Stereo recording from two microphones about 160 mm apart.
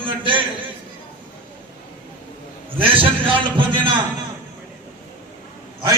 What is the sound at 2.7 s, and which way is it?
Music, 35° right (ahead or behind).